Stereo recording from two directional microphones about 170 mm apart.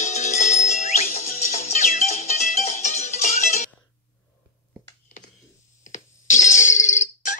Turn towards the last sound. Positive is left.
turn(degrees=45)  # may be behind; listen again after turning